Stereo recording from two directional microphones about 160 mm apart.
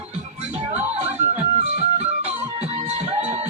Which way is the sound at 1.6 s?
45° right (ahead or behind).